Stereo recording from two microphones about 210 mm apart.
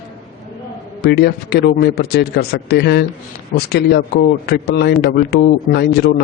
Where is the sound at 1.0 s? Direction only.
50° left (ahead or behind).